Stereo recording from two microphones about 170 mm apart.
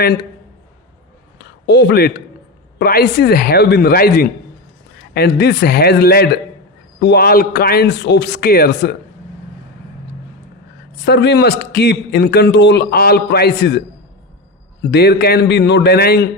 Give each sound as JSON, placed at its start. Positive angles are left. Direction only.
{"t": 1.4, "sound": "a sound", "side_deg": 80}
{"t": 2.7, "sound": "a man's voice", "side_deg": 70}
{"t": 10.9, "sound": "a man's voice", "side_deg": 90}
{"t": 14.8, "sound": "a man's voice", "side_deg": 75}